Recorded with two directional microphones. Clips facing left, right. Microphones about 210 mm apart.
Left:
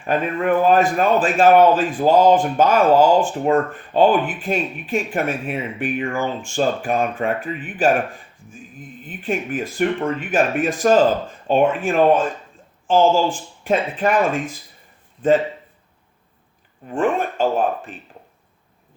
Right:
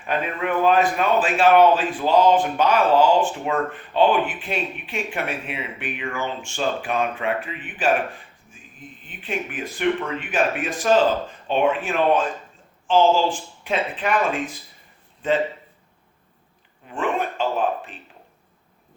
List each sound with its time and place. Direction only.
0.0 s speech: 45° left (ahead or behind)
9.0 s speech: 45° left (ahead or behind)
15.2 s speech: 50° left (ahead or behind)
16.9 s speech: 45° left (ahead or behind)